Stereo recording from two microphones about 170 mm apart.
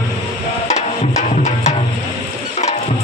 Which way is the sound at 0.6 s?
45° left (ahead or behind).